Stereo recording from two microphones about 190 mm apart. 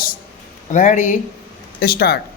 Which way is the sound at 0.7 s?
40° left (ahead or behind).